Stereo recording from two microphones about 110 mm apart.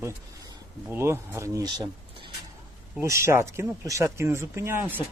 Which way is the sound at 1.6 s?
40° right (ahead or behind).